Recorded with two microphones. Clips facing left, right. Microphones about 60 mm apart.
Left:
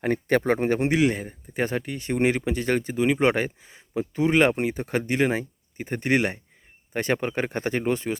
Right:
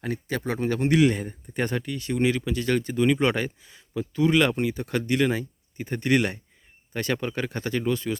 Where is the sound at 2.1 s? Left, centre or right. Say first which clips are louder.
Left 2 dB; left.